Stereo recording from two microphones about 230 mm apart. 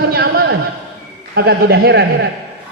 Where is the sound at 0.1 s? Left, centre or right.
Right.